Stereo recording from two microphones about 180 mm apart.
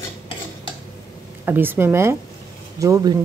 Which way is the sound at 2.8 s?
20° right (ahead or behind).